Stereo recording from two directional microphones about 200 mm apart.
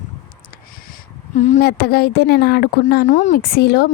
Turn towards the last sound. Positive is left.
turn(degrees=50)  # may be behind; listen again after turning